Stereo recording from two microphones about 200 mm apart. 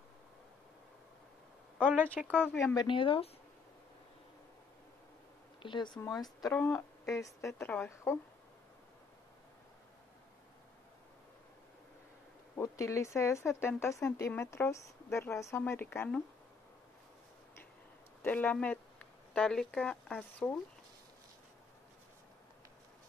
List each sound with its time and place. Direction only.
1.8 s speech: 5° right (ahead or behind)
2.2 s speech: 10° left (ahead or behind); by 3.3 s 25° left (ahead or behind)
5.6 s speech: 25° left (ahead or behind)
12.5 s speech: 15° left (ahead or behind)
18.2 s speech: 10° left (ahead or behind)